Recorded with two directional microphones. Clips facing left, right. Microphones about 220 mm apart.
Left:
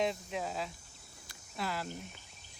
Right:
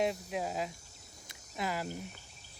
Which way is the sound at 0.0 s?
5° right (ahead or behind).